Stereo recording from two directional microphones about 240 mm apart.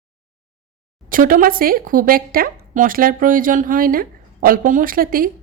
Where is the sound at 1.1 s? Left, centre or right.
Right.